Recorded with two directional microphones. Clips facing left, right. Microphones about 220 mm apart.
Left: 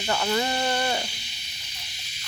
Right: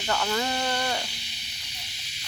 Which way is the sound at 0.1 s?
10° left (ahead or behind).